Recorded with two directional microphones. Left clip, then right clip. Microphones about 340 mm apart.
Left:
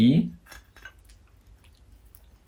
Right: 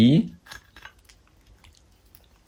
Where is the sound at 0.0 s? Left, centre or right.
Right.